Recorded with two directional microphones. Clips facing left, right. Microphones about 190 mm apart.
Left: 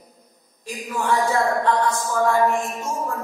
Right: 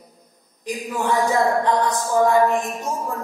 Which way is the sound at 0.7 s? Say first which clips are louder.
Right 1 dB; 20° right (ahead or behind).